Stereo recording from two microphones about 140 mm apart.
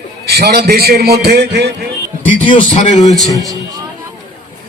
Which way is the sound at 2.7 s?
60° left (ahead or behind).